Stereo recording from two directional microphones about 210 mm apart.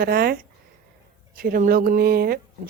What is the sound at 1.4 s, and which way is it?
Speech, 40° right (ahead or behind).